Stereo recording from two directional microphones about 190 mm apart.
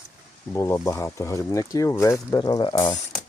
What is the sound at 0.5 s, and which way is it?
Speech, 15° left (ahead or behind).